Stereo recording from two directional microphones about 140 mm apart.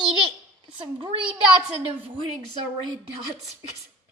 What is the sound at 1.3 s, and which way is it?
Speech, 40° right (ahead or behind).